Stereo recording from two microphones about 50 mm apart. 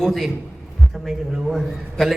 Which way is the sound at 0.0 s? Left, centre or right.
Centre.